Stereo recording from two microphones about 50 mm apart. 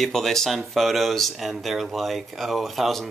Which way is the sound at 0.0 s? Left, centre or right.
Centre.